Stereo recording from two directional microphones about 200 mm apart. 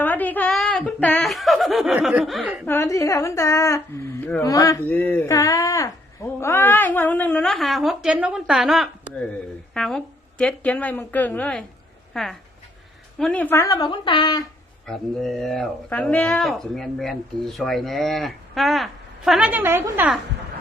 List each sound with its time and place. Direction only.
0.0 s speech: 10° left (ahead or behind)
2.6 s a woman's voice: 15° left (ahead or behind)
14.8 s speech: centre (ahead or behind)